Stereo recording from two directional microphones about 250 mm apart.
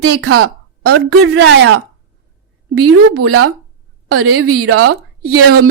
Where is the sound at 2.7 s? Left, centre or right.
Right.